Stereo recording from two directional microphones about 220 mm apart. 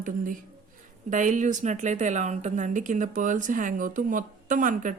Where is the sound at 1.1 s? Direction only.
35° right (ahead or behind).